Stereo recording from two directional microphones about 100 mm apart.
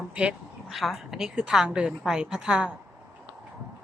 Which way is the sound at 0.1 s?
10° right (ahead or behind).